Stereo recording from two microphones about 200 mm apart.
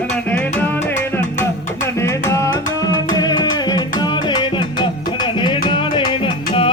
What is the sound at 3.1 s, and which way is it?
Music, 20° left (ahead or behind).